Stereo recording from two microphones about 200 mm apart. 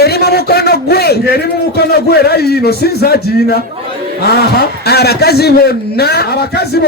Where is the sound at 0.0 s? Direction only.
55° left (ahead or behind).